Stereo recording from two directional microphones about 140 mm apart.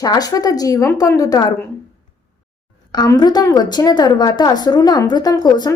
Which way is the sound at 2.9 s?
30° left (ahead or behind).